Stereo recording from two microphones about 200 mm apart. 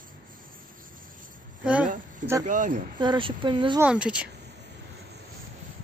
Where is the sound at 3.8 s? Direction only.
5° right (ahead or behind).